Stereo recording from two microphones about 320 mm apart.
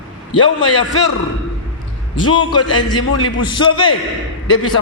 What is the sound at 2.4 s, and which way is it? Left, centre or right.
Speech, centre.